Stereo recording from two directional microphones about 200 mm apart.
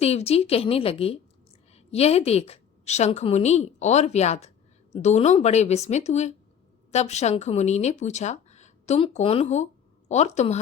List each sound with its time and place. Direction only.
0.0 s a woman's voice: 30° left (ahead or behind)